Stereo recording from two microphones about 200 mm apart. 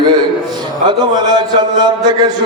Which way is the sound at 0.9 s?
20° right (ahead or behind).